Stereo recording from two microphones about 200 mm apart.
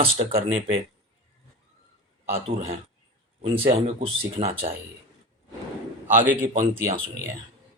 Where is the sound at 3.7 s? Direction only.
30° right (ahead or behind).